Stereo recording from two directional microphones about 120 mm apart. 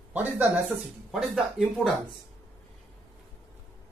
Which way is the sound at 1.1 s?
Centre (ahead or behind).